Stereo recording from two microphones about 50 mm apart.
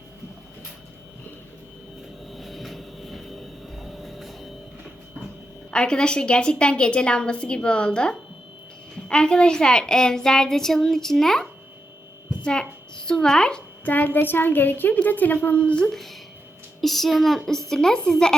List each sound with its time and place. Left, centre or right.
2.3 s vehicle: centre
5.7 s a woman's voice: centre
13.1 s a woman's voice: centre
13.8 s a woman's voice: left
15.9 s a woman's voice: centre